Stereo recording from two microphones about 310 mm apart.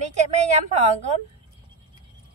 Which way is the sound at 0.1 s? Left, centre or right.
Right.